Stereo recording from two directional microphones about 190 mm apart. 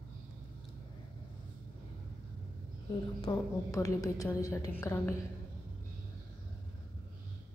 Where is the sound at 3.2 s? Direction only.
20° left (ahead or behind).